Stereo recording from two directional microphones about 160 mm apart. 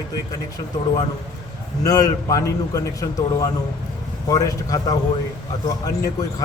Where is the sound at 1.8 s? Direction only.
20° left (ahead or behind).